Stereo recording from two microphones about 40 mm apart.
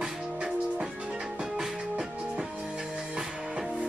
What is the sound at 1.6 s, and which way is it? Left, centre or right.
Music, centre.